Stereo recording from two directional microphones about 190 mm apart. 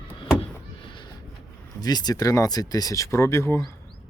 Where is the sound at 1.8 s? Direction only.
20° left (ahead or behind).